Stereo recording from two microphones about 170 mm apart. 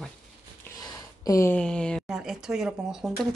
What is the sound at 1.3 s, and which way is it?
Speech, 15° left (ahead or behind).